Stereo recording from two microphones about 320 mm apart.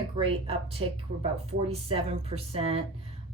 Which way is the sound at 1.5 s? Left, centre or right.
Centre.